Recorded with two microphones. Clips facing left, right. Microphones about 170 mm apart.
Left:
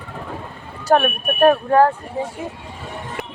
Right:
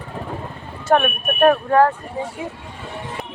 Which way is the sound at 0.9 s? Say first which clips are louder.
Left 1 dB; 35° left (ahead or behind).